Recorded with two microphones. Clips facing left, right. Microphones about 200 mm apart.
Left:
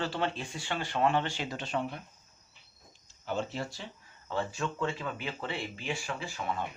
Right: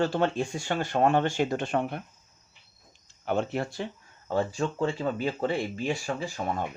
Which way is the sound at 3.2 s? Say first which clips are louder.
Right 6 dB; 60° right (ahead or behind).